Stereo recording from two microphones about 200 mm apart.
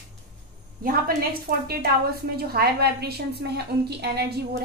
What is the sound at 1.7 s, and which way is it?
A woman's voice, 50° right (ahead or behind).